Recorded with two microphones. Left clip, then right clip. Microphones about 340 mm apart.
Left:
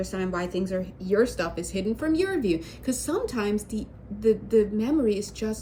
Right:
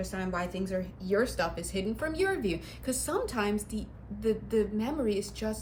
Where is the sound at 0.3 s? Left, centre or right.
Right.